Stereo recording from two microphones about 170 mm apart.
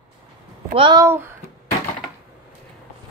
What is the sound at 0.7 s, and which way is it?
Speech, 30° right (ahead or behind).